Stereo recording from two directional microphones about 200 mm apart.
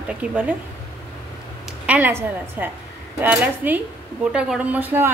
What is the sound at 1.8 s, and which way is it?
Speech, 10° right (ahead or behind).